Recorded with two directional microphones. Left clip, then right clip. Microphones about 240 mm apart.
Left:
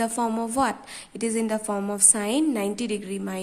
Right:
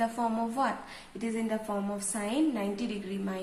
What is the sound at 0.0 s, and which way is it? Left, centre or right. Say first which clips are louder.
A woman's voice: left 4 dB; left.